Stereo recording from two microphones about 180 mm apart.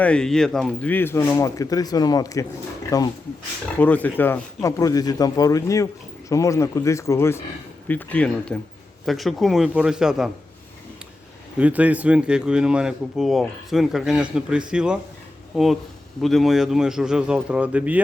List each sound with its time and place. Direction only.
0.0 s speech: 5° left (ahead or behind)
11.5 s speech: 10° right (ahead or behind)